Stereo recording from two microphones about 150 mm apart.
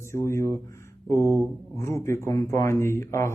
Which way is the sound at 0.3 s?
20° left (ahead or behind).